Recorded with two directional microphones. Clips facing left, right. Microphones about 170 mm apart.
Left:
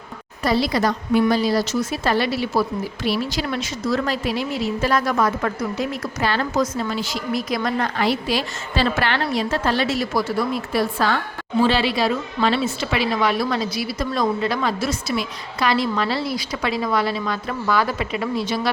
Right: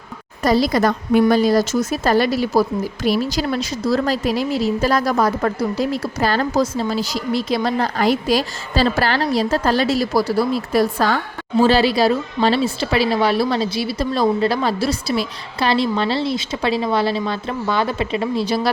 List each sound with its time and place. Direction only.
0.4 s a woman's voice: 45° right (ahead or behind)